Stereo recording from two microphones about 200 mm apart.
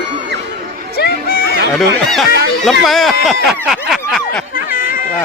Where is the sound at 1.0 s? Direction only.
50° left (ahead or behind).